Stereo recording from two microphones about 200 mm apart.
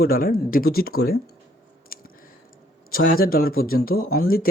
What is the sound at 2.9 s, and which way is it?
Speech, 50° left (ahead or behind).